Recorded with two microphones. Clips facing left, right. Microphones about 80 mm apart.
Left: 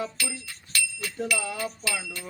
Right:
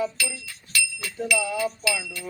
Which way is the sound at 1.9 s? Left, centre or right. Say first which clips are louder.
Right 4 dB; left.